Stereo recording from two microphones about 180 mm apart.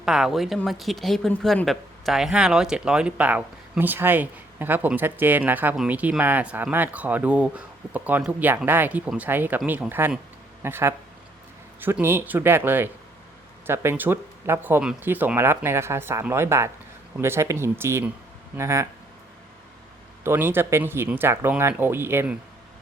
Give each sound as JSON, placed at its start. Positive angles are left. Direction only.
{"t": 0.0, "sound": "speech", "side_deg": -5}
{"t": 20.2, "sound": "speech", "side_deg": -10}